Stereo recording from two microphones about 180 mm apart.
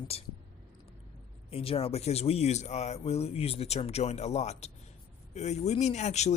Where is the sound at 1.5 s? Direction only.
30° left (ahead or behind).